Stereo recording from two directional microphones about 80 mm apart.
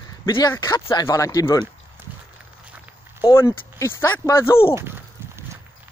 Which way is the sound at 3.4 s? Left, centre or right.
Left.